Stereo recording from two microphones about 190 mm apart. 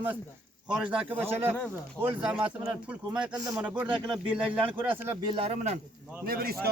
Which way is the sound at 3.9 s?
5° right (ahead or behind).